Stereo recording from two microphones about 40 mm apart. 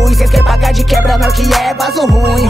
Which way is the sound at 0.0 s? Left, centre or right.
Centre.